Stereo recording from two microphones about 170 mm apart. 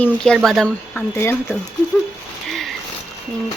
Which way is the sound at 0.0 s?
5° left (ahead or behind).